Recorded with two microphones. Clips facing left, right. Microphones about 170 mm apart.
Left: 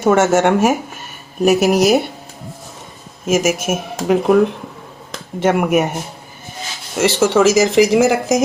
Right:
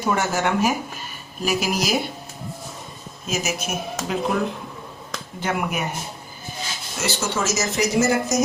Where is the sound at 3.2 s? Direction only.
90° left.